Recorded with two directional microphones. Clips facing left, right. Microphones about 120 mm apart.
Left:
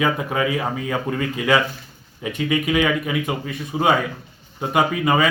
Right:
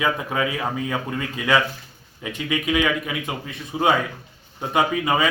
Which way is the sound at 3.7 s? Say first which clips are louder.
Left 1 dB; 5° right (ahead or behind).